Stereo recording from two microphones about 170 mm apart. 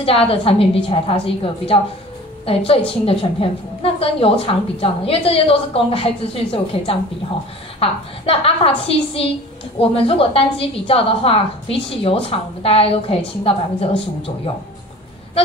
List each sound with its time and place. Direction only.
0.0 s a woman's voice: 35° left (ahead or behind)